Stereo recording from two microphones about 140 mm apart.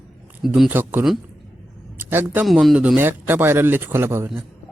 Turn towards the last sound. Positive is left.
turn(degrees=-20)  # may be behind; listen again after turning